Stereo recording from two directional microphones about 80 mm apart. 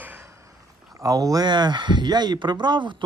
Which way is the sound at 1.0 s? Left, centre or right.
Right.